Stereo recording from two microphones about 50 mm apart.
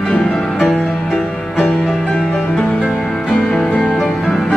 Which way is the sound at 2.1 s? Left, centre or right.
Centre.